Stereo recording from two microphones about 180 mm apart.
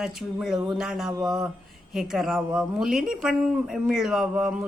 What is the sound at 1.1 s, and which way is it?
Speech, 20° right (ahead or behind).